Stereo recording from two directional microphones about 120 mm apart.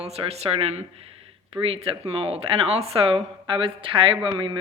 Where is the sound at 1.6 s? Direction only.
55° right (ahead or behind).